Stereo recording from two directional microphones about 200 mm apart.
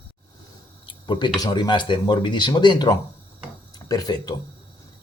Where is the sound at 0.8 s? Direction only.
20° left (ahead or behind).